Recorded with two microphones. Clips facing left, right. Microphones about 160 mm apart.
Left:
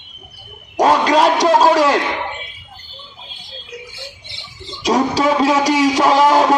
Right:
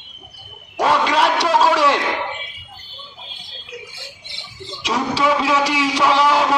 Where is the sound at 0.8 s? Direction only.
40° left (ahead or behind).